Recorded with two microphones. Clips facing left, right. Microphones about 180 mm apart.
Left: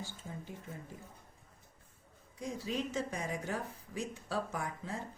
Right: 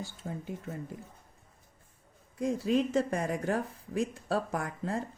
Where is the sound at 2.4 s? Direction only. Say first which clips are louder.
Right 9 dB; 55° right (ahead or behind).